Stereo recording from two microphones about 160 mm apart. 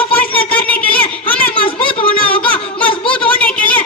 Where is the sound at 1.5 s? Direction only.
35° left (ahead or behind).